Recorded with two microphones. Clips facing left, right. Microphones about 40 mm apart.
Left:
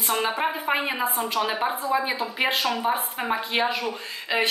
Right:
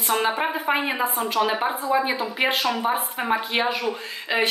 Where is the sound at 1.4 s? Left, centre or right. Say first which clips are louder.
Right 4 dB; centre.